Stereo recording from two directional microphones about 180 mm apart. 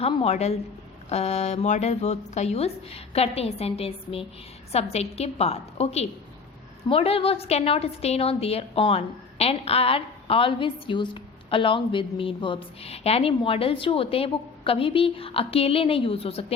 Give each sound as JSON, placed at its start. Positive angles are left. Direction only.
{"t": 0.0, "sound": "a woman's voice", "side_deg": 35}